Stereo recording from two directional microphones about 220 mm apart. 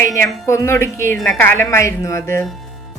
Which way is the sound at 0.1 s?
15° left (ahead or behind).